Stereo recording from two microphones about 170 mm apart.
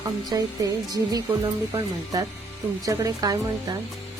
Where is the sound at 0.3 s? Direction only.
20° right (ahead or behind).